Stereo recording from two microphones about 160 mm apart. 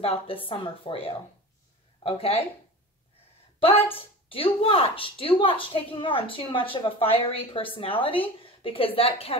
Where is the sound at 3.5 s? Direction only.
35° left (ahead or behind).